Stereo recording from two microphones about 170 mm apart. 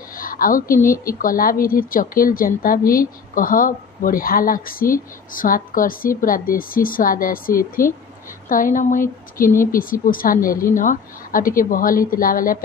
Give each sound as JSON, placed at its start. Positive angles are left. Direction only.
{"t": 0.1, "sound": "a woman's voice", "side_deg": 55}